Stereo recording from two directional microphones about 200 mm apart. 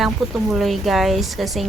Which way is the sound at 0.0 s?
Centre (ahead or behind).